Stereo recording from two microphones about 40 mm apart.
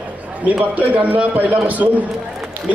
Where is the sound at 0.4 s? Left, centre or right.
Right.